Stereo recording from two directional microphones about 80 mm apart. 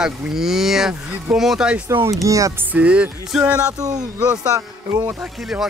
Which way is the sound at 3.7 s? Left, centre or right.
Right.